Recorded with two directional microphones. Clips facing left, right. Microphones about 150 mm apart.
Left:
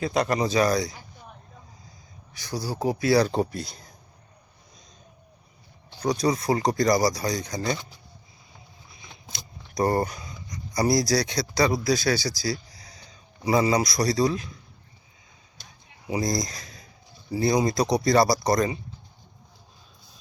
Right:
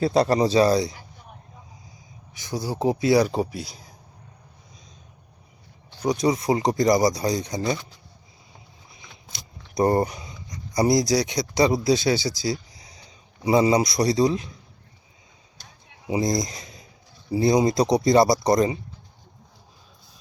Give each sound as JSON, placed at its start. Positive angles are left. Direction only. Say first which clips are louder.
{"t": 0.0, "sound": "speech", "louder": "right 5 dB", "side_deg": -30}
{"t": 2.3, "sound": "speech", "louder": "right 2 dB", "side_deg": -20}
{"t": 6.0, "sound": "speech", "louder": "right 2 dB", "side_deg": -20}
{"t": 9.7, "sound": "speech", "louder": "right 3 dB", "side_deg": -20}
{"t": 16.0, "sound": "speech", "louder": "right 3 dB", "side_deg": -20}